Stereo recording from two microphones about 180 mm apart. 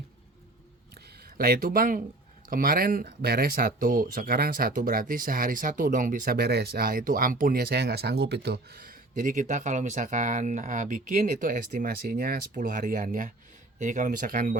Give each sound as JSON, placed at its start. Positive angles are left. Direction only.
{"t": 1.4, "sound": "speech", "side_deg": -55}